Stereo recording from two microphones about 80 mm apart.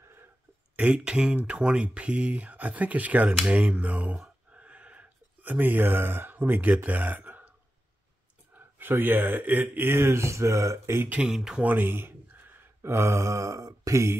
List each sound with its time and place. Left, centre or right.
0.7 s speech: centre
4.2 s a sound: centre
8.5 s speech: right
11.1 s speech: centre
11.6 s speech: right
12.5 s mantra: right